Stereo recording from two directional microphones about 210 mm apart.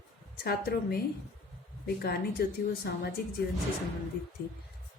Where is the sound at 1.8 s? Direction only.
45° left (ahead or behind).